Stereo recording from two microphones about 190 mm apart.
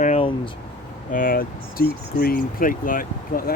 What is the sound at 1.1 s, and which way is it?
Speech, 50° left (ahead or behind).